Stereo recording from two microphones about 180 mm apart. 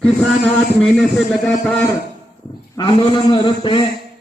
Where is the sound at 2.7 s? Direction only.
25° left (ahead or behind).